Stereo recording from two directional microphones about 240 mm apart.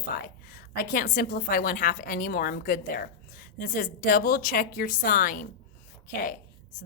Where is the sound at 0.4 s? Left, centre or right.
Left.